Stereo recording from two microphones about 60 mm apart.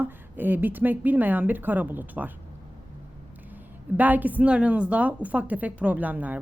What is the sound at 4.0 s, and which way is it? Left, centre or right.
Speech, right.